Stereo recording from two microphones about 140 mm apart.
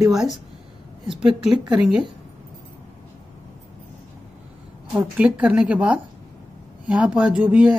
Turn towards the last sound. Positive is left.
turn(degrees=-5)  # may be behind; listen again after turning